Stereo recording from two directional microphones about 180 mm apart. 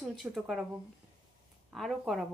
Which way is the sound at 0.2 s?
Centre (ahead or behind).